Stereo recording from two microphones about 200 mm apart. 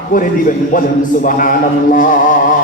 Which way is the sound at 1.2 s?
40° left (ahead or behind).